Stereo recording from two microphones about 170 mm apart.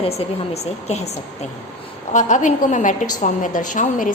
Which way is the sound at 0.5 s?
40° left (ahead or behind).